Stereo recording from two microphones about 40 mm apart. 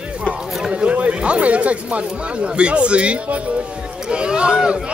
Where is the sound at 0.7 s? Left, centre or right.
Right.